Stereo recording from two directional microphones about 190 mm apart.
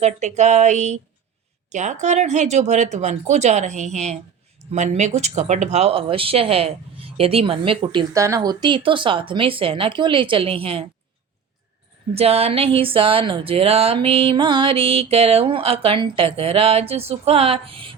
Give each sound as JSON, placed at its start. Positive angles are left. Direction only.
{"t": 0.0, "sound": "speech", "side_deg": -35}
{"t": 12.1, "sound": "speech", "side_deg": -30}